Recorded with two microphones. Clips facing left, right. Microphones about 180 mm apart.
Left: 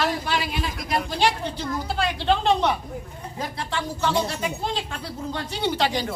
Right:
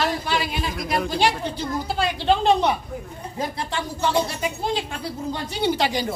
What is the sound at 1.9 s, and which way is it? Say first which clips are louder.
A woman's voice: right 2 dB; 5° right (ahead or behind).